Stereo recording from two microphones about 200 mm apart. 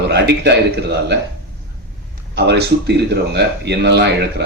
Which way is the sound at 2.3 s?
55° right (ahead or behind).